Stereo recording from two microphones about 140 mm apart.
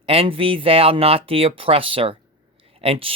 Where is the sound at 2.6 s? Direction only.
45° right (ahead or behind).